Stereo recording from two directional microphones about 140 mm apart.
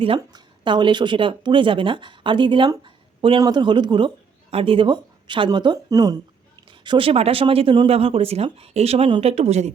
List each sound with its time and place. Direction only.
0.2 s speech: 30° right (ahead or behind); by 9.7 s 50° right (ahead or behind)